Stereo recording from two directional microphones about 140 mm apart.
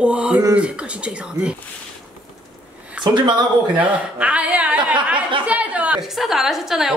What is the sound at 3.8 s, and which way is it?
A man's voice, 10° right (ahead or behind).